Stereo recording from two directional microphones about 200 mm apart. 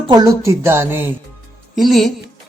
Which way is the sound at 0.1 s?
20° right (ahead or behind).